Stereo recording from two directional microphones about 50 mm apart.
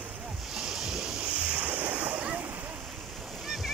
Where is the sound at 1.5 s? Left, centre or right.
Right.